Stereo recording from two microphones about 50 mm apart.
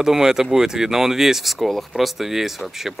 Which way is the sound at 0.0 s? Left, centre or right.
Centre.